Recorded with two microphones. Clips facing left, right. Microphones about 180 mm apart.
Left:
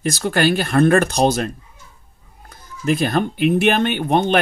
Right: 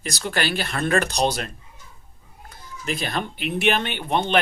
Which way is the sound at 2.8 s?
50° left (ahead or behind).